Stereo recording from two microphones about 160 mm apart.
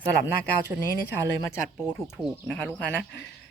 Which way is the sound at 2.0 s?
5° right (ahead or behind).